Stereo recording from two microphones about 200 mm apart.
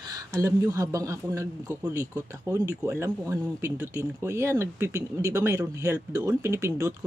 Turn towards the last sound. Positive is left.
turn(degrees=-15)  # may be behind; listen again after turning